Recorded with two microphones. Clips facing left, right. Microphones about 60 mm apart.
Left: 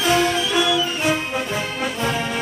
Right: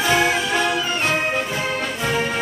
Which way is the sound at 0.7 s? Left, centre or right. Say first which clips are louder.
Left 1 dB; right.